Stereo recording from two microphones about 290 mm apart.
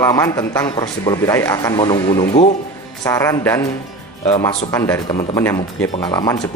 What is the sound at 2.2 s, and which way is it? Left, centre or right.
Speech, left.